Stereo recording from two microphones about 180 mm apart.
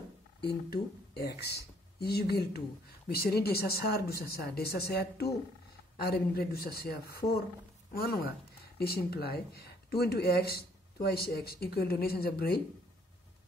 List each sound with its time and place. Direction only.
0.4 s speech: 60° left (ahead or behind)